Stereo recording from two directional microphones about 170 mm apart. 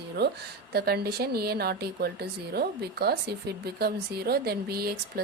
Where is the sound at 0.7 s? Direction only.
65° right (ahead or behind).